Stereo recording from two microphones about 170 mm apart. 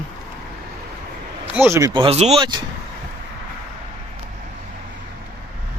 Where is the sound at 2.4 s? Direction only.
25° right (ahead or behind).